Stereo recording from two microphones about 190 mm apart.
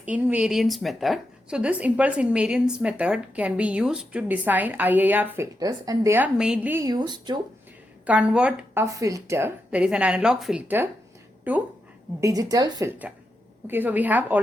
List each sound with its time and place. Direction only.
0.0 s speech: 5° right (ahead or behind); by 7.3 s 20° right (ahead or behind)
8.0 s a woman's voice: 5° right (ahead or behind)